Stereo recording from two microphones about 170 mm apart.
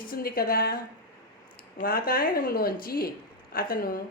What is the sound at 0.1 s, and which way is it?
Speech, 60° left (ahead or behind).